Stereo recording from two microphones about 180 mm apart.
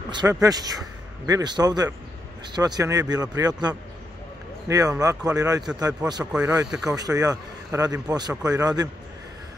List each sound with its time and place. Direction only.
0.1 s a man's voice: 20° right (ahead or behind)
6.3 s speech: 5° right (ahead or behind)
7.0 s a man's voice: 20° right (ahead or behind)